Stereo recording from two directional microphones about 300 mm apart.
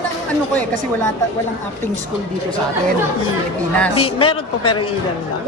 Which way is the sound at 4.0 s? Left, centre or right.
Centre.